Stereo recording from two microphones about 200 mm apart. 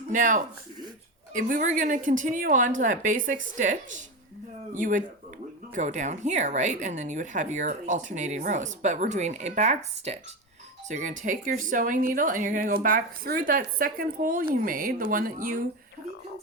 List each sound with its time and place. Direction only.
0.1 s speech: 40° right (ahead or behind)